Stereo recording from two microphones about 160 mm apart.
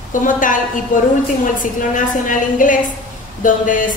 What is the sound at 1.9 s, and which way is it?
A woman's voice, 55° left (ahead or behind).